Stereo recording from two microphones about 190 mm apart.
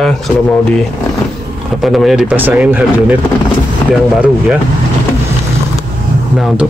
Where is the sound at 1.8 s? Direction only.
Centre (ahead or behind).